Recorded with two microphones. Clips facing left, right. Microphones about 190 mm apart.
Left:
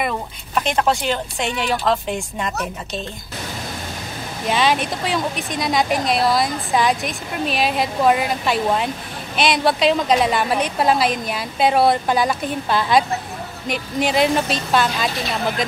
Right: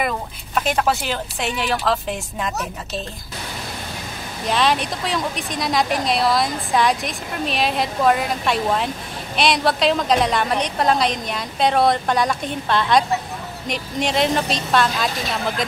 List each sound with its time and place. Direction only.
0.6 s a woman's voice: centre (ahead or behind)
4.5 s a woman's voice: centre (ahead or behind)